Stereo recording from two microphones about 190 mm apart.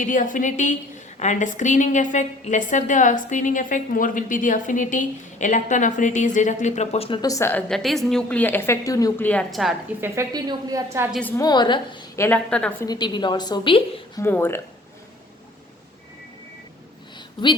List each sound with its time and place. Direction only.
0.0 s a woman's voice: 45° left (ahead or behind)
7.2 s a woman's voice: 15° left (ahead or behind); by 9.7 s centre (ahead or behind)
10.0 s a woman's voice: 15° right (ahead or behind)
11.1 s a woman's voice: 10° left (ahead or behind)
11.4 s a woman's voice: 20° left (ahead or behind); by 12.7 s 5° left (ahead or behind)
12.8 s a woman's voice: 20° left (ahead or behind)
14.2 s a woman's voice: 10° left (ahead or behind)